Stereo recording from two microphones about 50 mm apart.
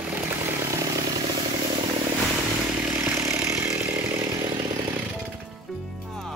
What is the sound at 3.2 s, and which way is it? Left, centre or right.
Chainsaw, right.